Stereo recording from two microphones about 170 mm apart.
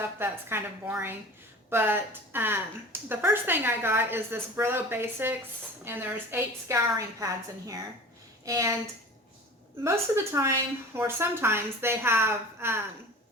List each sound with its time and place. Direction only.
0.2 s a woman's voice: 15° right (ahead or behind)
8.4 s a woman's voice: 20° right (ahead or behind)
9.8 s a woman's voice: 15° right (ahead or behind)